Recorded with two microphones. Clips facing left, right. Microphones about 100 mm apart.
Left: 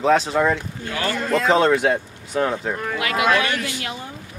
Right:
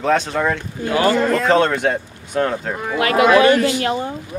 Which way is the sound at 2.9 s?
40° right (ahead or behind).